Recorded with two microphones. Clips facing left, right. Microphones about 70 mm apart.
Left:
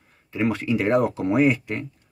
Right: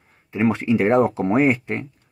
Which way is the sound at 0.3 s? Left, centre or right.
Right.